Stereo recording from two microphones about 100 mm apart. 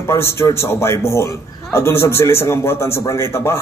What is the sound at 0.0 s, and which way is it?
A man's voice, 25° left (ahead or behind).